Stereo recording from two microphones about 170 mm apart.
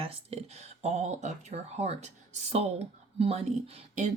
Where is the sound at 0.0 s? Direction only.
35° right (ahead or behind).